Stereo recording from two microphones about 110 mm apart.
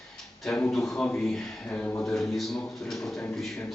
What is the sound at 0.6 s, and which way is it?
A man's voice, 5° left (ahead or behind).